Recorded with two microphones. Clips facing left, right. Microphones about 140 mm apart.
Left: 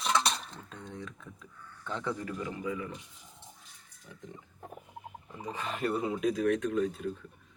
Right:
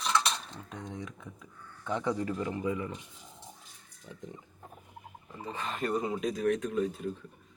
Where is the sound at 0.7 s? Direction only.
15° right (ahead or behind).